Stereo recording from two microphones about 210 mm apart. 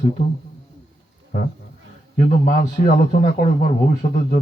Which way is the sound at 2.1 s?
40° left (ahead or behind).